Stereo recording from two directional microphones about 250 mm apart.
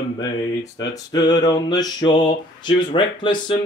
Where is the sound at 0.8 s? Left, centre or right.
Centre.